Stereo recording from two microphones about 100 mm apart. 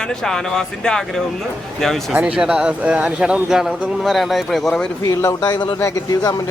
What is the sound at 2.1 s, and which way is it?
Speech, 10° right (ahead or behind).